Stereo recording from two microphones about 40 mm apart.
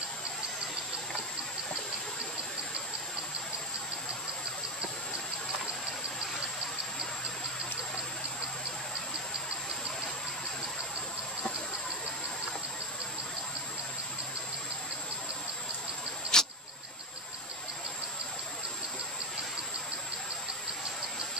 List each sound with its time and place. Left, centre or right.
16.3 s vehicle: centre